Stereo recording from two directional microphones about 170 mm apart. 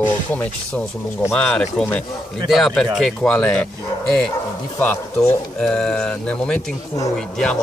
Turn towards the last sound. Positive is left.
turn(degrees=5)  # may be behind; listen again after turning